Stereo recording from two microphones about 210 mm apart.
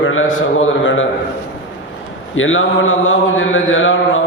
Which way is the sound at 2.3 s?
70° left (ahead or behind).